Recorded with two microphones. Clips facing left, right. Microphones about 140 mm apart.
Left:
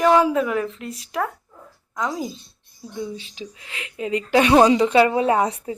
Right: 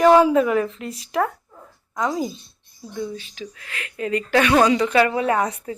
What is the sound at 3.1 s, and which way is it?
Speech, 25° left (ahead or behind).